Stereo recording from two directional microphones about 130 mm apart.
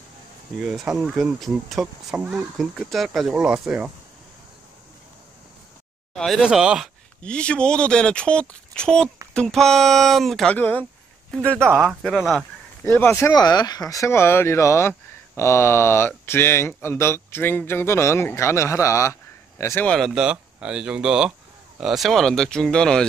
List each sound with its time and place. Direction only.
0.7 s speech: centre (ahead or behind)
6.1 s speech: centre (ahead or behind)
7.2 s speech: 10° left (ahead or behind)
11.6 s speech: 15° right (ahead or behind)
11.9 s speech: 5° right (ahead or behind)
12.8 s speech: 15° left (ahead or behind)
13.3 s speech: 30° left (ahead or behind)
19.9 s speech: centre (ahead or behind)